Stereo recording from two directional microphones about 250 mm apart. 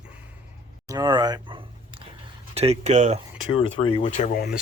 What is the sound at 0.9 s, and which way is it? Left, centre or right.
Speech, centre.